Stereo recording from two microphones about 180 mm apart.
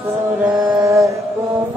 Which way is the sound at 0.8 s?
15° right (ahead or behind).